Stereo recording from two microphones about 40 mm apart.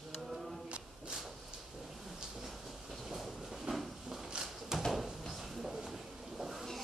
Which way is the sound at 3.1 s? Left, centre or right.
Centre.